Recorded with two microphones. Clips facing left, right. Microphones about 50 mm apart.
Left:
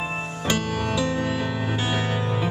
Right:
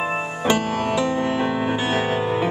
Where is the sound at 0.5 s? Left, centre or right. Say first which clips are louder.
Right 4 dB; right.